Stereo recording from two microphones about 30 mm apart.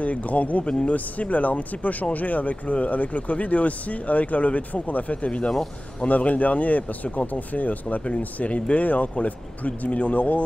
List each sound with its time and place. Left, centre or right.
0.0 s speech: left